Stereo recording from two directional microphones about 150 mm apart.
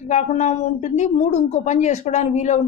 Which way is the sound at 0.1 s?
50° left (ahead or behind).